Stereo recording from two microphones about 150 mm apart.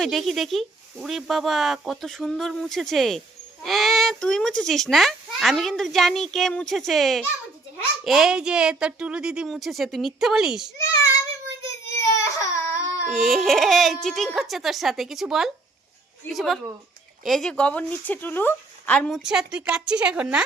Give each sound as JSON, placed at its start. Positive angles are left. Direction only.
{"t": 0.0, "sound": "speech", "side_deg": 0}
{"t": 11.9, "sound": "baby cry", "side_deg": 20}
{"t": 13.1, "sound": "speech", "side_deg": 0}